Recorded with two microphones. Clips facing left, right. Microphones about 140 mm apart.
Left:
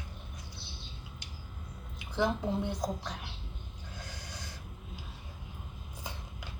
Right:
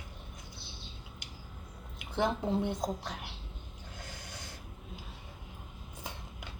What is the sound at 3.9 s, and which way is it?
Snort, 25° right (ahead or behind).